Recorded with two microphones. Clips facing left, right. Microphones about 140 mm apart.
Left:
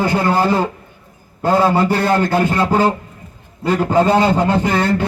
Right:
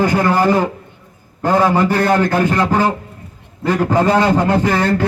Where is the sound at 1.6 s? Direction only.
25° left (ahead or behind).